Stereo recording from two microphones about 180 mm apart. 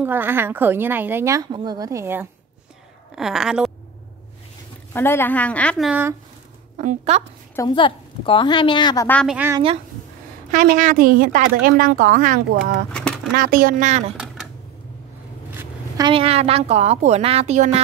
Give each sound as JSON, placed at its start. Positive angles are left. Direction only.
{"t": 0.0, "sound": "a woman's voice", "side_deg": -10}
{"t": 3.2, "sound": "speech", "side_deg": 0}
{"t": 4.9, "sound": "a woman's voice", "side_deg": 10}
{"t": 5.9, "sound": "a woman's voice", "side_deg": -10}
{"t": 6.8, "sound": "speech", "side_deg": -40}
{"t": 7.5, "sound": "a woman's voice", "side_deg": 25}
{"t": 9.0, "sound": "a woman's voice", "side_deg": 10}
{"t": 9.3, "sound": "a woman's voice", "side_deg": -10}
{"t": 10.5, "sound": "a woman's voice", "side_deg": -45}
{"t": 12.9, "sound": "pigeon", "side_deg": 5}
{"t": 13.4, "sound": "a woman's voice", "side_deg": -50}
{"t": 14.1, "sound": "a sound", "side_deg": -5}
{"t": 16.1, "sound": "speech", "side_deg": -30}